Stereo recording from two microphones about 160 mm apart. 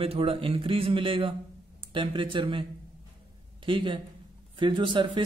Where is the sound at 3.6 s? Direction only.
30° right (ahead or behind).